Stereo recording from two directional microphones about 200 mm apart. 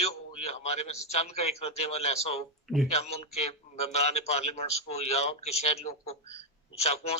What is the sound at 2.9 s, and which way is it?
A man's voice, 30° left (ahead or behind).